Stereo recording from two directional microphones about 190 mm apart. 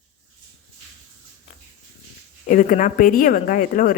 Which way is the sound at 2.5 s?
45° left (ahead or behind).